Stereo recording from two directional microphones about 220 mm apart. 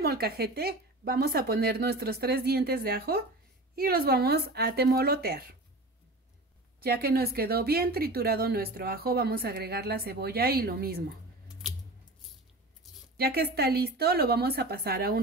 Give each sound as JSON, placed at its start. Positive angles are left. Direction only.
{"t": 0.0, "sound": "speech", "side_deg": -45}
{"t": 6.8, "sound": "speech", "side_deg": -45}
{"t": 11.6, "sound": "squish", "side_deg": 0}
{"t": 12.8, "sound": "a sound", "side_deg": 0}
{"t": 13.2, "sound": "speech", "side_deg": -45}